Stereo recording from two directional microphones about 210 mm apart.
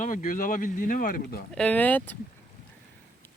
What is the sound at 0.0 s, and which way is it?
Speech, 40° left (ahead or behind).